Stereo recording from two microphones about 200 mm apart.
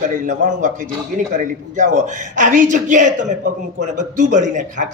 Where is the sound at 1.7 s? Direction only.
40° right (ahead or behind).